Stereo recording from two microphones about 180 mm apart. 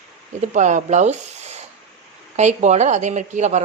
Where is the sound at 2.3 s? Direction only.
40° right (ahead or behind).